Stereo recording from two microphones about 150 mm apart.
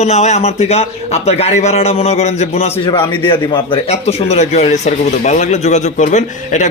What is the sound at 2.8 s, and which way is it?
A man's voice, 35° left (ahead or behind).